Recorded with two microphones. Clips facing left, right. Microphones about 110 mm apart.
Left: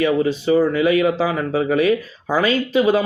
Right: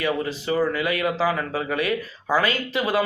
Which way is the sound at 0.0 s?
25° left (ahead or behind).